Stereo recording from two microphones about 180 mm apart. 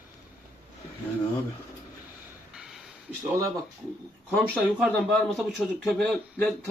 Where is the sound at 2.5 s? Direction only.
5° right (ahead or behind).